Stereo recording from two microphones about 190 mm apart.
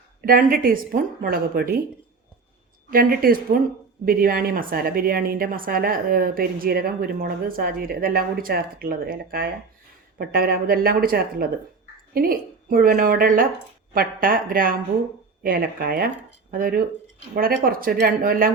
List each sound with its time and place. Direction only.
0.3 s a woman's voice: 50° right (ahead or behind)
2.9 s a woman's voice: 50° right (ahead or behind)